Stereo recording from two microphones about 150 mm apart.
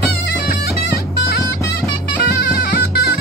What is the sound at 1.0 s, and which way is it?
Music, 90° left.